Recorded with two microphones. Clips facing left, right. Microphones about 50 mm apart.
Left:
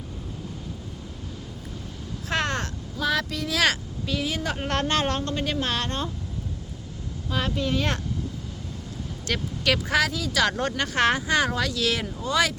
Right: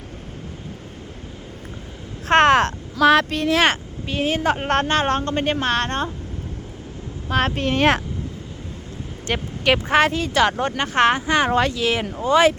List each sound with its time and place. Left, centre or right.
2.3 s speech: right
7.3 s speech: right
9.2 s speech: right
10.4 s speech: right